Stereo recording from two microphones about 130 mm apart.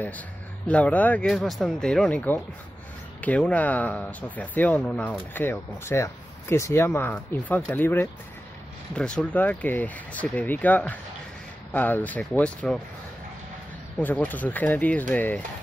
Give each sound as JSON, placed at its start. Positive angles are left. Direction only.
{"t": 0.7, "sound": "speech", "side_deg": 10}
{"t": 13.9, "sound": "speech", "side_deg": 10}